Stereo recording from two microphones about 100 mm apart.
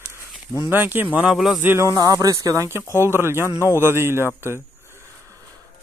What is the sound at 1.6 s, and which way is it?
Speech, 25° right (ahead or behind).